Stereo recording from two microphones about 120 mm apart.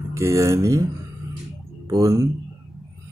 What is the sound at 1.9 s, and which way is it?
Speech, 30° right (ahead or behind).